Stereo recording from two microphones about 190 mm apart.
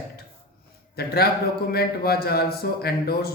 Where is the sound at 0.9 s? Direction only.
55° left (ahead or behind).